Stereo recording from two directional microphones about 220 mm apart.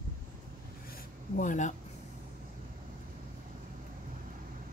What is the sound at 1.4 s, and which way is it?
Speech, 35° left (ahead or behind).